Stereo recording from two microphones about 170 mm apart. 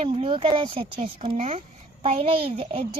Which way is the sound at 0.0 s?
30° right (ahead or behind).